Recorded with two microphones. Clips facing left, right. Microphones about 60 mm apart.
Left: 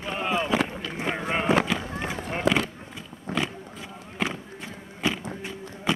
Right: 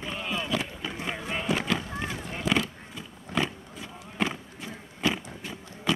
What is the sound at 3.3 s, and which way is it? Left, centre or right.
Roaring cats, left.